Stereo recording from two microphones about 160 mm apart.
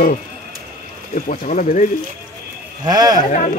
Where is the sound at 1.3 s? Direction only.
55° left (ahead or behind).